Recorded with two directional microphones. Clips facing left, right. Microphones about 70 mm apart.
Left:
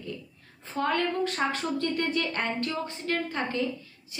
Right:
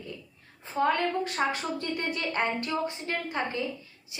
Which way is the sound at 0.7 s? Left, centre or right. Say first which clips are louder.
Right 1 dB; centre.